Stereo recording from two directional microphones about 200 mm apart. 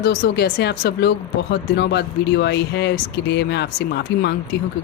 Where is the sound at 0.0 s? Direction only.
55° left (ahead or behind).